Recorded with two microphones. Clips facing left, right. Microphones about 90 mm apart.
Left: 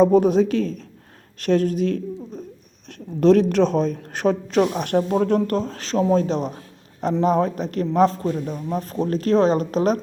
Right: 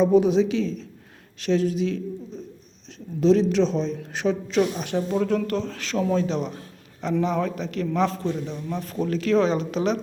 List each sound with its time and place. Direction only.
0.0 s a man's voice: 45° left (ahead or behind)